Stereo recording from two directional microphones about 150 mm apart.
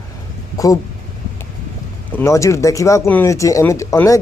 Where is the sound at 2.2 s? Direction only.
20° left (ahead or behind).